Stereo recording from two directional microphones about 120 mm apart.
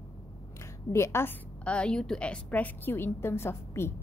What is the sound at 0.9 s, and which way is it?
Speech, 20° left (ahead or behind).